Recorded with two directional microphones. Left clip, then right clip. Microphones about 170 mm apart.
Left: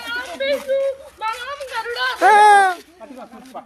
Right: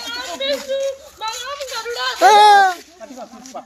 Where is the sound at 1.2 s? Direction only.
35° right (ahead or behind).